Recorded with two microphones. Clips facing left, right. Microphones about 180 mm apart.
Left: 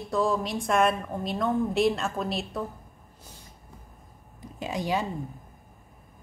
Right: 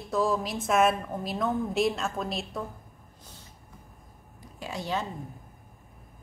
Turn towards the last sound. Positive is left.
turn(degrees=15)  # may be behind; listen again after turning